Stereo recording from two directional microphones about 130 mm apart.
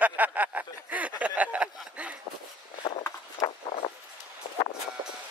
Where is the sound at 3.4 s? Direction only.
25° left (ahead or behind).